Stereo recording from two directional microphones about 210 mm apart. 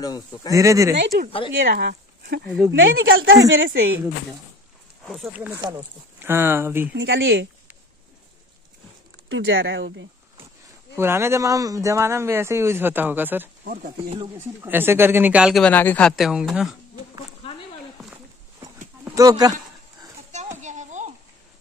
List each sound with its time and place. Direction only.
0.5 s speech: 15° right (ahead or behind)
1.5 s speech: 55° right (ahead or behind)
2.4 s speech: centre (ahead or behind)
2.7 s speech: 65° right (ahead or behind)
5.0 s speech: centre (ahead or behind)
7.0 s speech: 65° right (ahead or behind)
9.3 s speech: 60° right (ahead or behind)
11.0 s speech: 10° right (ahead or behind)
14.6 s speech: 10° right (ahead or behind)
19.0 s speech: 15° right (ahead or behind)
20.6 s a sound: 35° right (ahead or behind)